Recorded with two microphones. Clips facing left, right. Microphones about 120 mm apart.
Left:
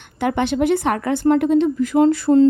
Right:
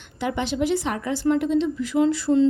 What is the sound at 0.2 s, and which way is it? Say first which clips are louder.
Speech: left 6 dB; 55° left (ahead or behind).